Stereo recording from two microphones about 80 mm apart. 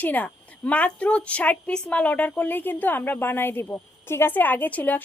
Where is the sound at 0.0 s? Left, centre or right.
Left.